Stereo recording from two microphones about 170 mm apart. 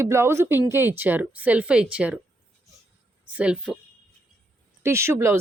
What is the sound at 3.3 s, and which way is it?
Speech, 5° right (ahead or behind).